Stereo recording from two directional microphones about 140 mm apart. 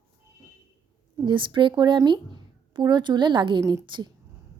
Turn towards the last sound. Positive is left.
turn(degrees=-30)  # may be behind; listen again after turning